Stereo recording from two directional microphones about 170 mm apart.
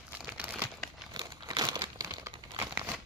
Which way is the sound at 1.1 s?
20° right (ahead or behind).